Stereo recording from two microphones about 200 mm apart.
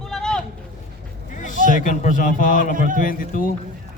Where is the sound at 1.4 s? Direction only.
40° left (ahead or behind).